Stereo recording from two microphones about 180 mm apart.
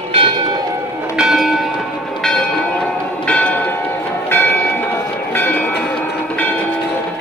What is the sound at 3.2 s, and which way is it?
Church bell, 10° left (ahead or behind).